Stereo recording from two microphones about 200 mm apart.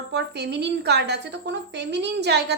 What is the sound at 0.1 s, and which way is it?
A woman's voice, 60° right (ahead or behind).